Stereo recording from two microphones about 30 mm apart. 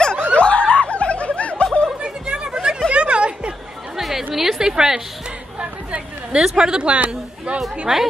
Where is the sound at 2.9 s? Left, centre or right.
Right.